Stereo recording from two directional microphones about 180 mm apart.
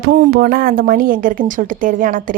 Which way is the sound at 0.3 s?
55° right (ahead or behind).